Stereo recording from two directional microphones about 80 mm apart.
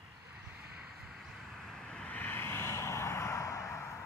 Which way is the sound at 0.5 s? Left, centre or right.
Centre.